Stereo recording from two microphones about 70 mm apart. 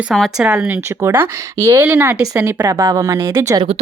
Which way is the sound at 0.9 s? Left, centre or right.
Right.